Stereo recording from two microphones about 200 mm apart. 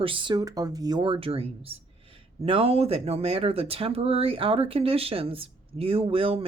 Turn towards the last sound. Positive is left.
turn(degrees=-30)  # may be behind; listen again after turning